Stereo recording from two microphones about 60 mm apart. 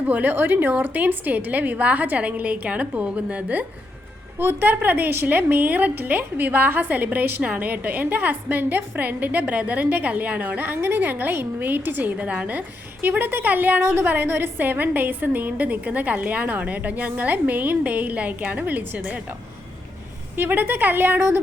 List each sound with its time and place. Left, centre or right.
0.0 s a woman's voice: right
4.4 s a woman's voice: right
12.2 s a woman's voice: centre
20.3 s a woman's voice: right